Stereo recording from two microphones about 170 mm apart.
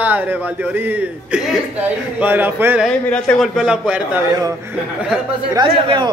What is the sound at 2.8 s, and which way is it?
A man's voice, 5° left (ahead or behind).